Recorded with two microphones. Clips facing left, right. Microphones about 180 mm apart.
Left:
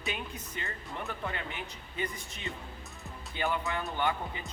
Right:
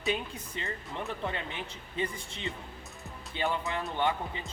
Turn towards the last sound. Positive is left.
turn(degrees=-25)  # may be behind; listen again after turning